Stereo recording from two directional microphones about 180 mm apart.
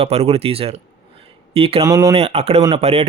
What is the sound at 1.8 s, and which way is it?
Speech, 20° right (ahead or behind).